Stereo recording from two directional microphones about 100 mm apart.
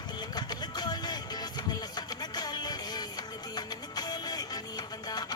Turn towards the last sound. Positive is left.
turn(degrees=40)  # may be behind; listen again after turning